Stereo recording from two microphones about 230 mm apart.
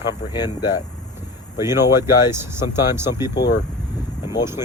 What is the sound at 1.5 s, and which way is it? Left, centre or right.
Speech, centre.